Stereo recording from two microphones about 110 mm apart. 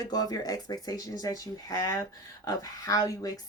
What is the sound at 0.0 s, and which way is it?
Speech, 35° left (ahead or behind).